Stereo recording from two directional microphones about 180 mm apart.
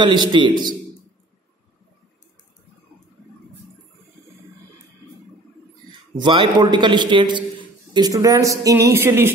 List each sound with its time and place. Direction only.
0.0 s a man's voice: 25° right (ahead or behind)
5.9 s a man's voice: 25° right (ahead or behind)